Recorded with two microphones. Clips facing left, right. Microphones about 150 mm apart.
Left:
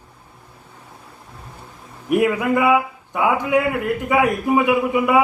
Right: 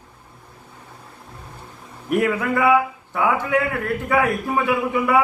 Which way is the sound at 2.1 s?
15° left (ahead or behind).